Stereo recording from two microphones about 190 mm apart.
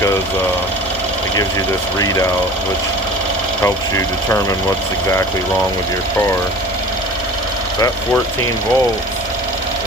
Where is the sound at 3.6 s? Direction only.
15° left (ahead or behind).